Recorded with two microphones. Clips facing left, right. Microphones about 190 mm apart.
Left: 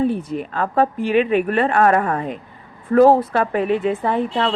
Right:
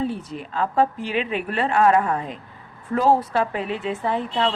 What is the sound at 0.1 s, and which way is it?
A woman's voice, 55° left (ahead or behind).